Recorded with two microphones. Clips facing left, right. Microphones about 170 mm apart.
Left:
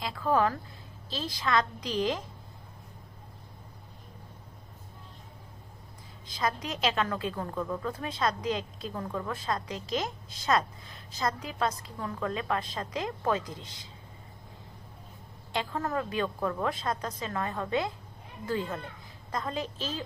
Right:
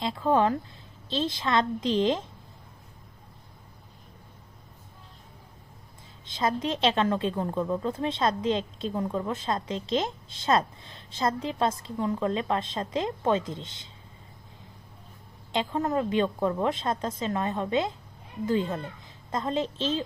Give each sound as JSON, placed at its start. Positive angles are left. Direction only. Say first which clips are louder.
{"t": 0.0, "sound": "a woman's voice", "louder": "right 3 dB", "side_deg": -25}
{"t": 6.2, "sound": "a woman's voice", "louder": "right 5 dB", "side_deg": -25}
{"t": 15.5, "sound": "a woman's voice", "louder": "right 5 dB", "side_deg": -20}